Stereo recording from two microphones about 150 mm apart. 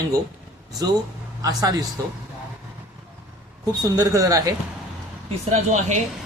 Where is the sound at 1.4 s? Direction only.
25° right (ahead or behind).